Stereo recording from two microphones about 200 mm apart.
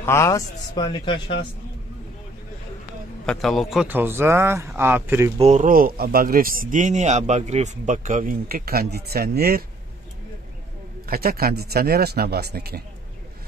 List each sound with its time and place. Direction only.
0.0 s a man's voice: 15° left (ahead or behind)
3.3 s speech: centre (ahead or behind)
5.4 s speech: 35° right (ahead or behind)
11.1 s speech: 50° right (ahead or behind)